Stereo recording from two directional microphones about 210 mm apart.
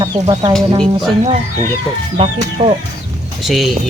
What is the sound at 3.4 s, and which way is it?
Speech, centre (ahead or behind).